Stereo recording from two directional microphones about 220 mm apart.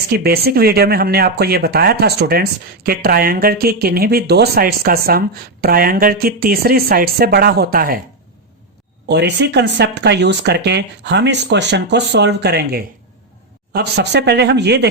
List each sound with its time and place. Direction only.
0.1 s speech: 45° right (ahead or behind)
9.0 s speech: 50° right (ahead or behind)